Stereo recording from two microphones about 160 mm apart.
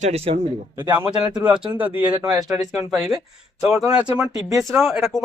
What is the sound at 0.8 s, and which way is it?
A man's voice, 15° right (ahead or behind).